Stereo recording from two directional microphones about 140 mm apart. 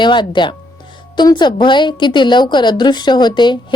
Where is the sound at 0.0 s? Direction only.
35° left (ahead or behind).